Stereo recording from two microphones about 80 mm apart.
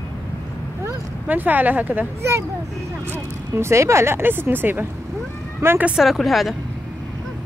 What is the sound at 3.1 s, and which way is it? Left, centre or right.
Speech, right.